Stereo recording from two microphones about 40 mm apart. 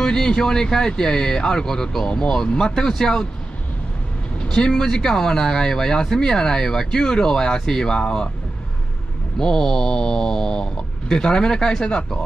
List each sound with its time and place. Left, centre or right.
0.0 s speech: centre
2.7 s speech: centre
4.4 s speech: centre
9.4 s speech: centre